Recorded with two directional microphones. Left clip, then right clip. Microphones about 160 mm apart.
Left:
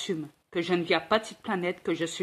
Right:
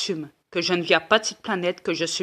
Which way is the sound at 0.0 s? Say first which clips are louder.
Right 5 dB; 10° right (ahead or behind).